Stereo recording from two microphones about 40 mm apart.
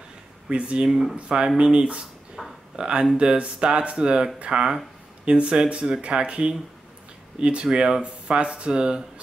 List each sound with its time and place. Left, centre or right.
0.5 s speech: right
0.8 s speech: centre
2.4 s a sound: centre
2.7 s speech: right